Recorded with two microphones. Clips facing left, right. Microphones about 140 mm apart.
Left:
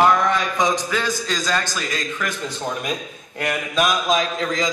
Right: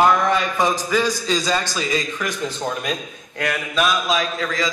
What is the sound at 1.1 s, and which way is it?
Mantra, 50° left (ahead or behind).